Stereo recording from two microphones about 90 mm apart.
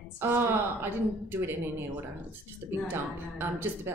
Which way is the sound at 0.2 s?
25° right (ahead or behind).